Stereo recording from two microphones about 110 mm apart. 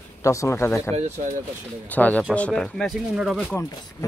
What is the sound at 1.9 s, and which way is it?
Speech, 15° left (ahead or behind).